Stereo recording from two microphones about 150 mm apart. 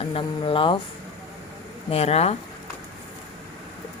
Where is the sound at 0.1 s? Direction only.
35° left (ahead or behind).